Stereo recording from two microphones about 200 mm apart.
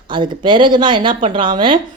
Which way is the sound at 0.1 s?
25° right (ahead or behind).